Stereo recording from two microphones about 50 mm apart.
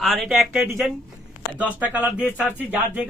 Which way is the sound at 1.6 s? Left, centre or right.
Right.